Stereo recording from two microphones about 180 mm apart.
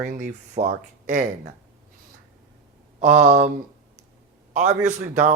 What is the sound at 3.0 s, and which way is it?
Speech, 40° right (ahead or behind).